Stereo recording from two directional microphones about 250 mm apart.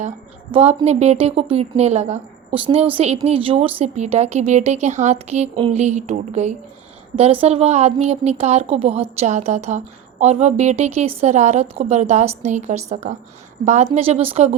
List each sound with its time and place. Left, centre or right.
0.5 s a woman's voice: right